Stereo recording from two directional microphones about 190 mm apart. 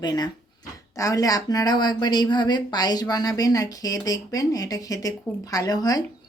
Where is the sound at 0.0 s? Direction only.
20° left (ahead or behind).